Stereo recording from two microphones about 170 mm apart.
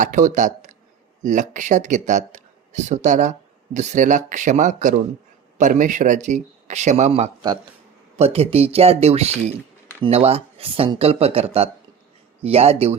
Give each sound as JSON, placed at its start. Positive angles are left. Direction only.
{"t": 0.0, "sound": "speech", "side_deg": -50}